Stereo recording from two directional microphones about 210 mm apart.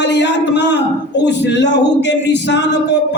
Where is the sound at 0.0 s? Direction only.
55° left (ahead or behind).